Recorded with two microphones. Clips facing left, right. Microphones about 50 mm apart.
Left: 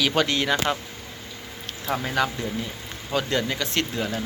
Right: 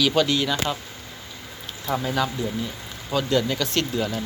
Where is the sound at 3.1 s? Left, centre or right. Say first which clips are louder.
Right 2 dB; left.